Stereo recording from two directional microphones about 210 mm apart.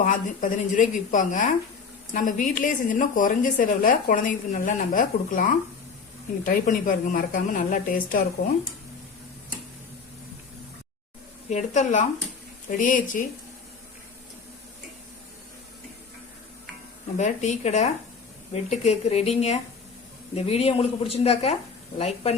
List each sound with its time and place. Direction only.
0.0 s a woman's voice: 35° left (ahead or behind)
11.4 s a woman's voice: 35° left (ahead or behind)
17.2 s a woman's voice: 35° left (ahead or behind)